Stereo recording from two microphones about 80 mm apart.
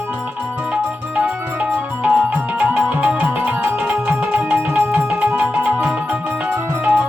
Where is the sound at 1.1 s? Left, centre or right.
Centre.